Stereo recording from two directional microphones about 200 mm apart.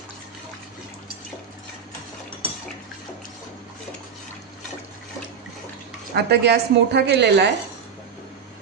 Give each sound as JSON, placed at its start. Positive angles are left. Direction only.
{"t": 6.1, "sound": "a woman's voice", "side_deg": -55}